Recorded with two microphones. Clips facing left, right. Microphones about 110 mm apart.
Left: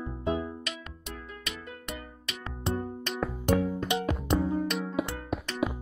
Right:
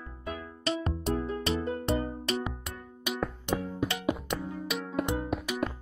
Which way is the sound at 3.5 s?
50° left (ahead or behind).